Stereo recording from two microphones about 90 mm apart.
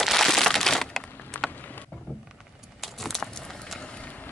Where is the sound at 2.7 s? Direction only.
Centre (ahead or behind).